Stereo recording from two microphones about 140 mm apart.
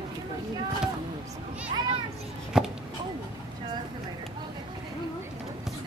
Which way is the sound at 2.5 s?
5° right (ahead or behind).